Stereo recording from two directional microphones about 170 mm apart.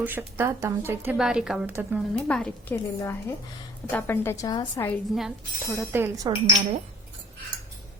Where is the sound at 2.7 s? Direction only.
15° left (ahead or behind).